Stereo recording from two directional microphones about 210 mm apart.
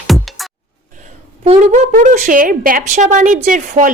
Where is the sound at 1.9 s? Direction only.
40° right (ahead or behind).